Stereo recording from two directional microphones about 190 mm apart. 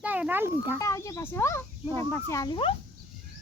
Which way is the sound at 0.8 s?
15° left (ahead or behind).